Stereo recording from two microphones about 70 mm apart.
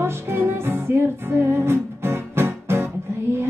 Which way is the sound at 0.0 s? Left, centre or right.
Right.